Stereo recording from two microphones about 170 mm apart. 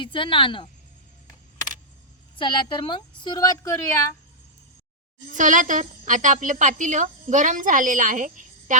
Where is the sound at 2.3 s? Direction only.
30° left (ahead or behind).